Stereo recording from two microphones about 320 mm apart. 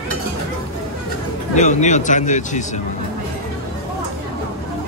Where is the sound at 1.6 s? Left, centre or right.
Left.